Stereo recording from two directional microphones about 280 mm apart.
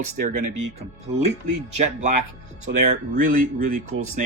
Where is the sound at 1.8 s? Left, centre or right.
Right.